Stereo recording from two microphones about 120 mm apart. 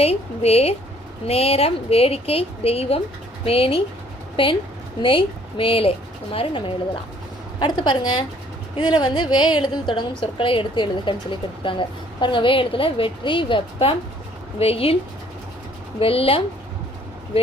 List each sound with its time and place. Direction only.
0.0 s a woman's voice: 60° left (ahead or behind)
16.0 s a woman's voice: 50° left (ahead or behind)